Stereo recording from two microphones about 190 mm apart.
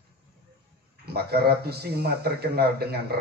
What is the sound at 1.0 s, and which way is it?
Speech, 55° right (ahead or behind).